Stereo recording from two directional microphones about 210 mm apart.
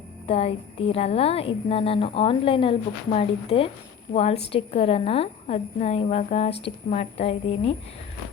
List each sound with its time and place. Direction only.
0.3 s a woman's voice: 30° left (ahead or behind)